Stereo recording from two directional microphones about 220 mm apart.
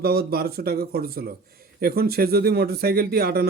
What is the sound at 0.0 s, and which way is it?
Speech, 45° right (ahead or behind).